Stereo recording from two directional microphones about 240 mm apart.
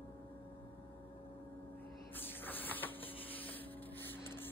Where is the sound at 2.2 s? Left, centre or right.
Centre.